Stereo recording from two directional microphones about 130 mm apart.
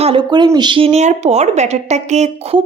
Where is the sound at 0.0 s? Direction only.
40° right (ahead or behind); by 2.6 s 60° right (ahead or behind).